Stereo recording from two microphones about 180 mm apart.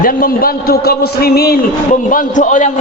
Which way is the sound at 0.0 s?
55° left (ahead or behind).